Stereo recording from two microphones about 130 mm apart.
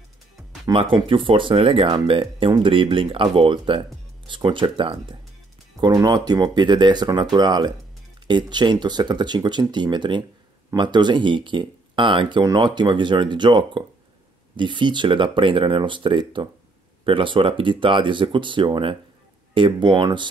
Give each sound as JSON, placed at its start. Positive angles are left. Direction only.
{"t": 0.7, "sound": "speech", "side_deg": -30}
{"t": 1.0, "sound": "speech", "side_deg": -40}
{"t": 5.8, "sound": "speech", "side_deg": -30}